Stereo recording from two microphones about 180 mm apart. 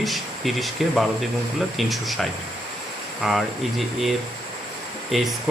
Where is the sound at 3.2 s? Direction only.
Centre (ahead or behind).